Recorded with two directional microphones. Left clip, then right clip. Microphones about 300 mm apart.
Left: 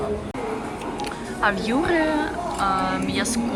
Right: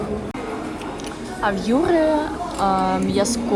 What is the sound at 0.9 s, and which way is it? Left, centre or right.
Speech, centre.